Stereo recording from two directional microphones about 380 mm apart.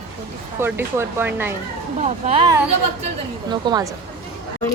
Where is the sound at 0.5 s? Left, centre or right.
Centre.